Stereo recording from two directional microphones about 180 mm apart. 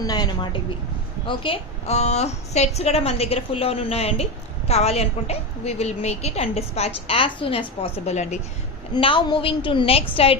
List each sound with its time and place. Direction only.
0.0 s a woman's voice: 20° left (ahead or behind); by 8.4 s 40° left (ahead or behind)
8.9 s a woman's voice: 30° left (ahead or behind)